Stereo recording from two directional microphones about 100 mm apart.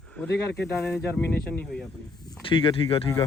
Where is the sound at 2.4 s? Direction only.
60° left (ahead or behind).